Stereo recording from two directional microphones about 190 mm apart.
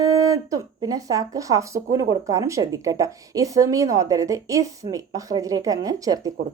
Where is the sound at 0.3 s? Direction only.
20° right (ahead or behind).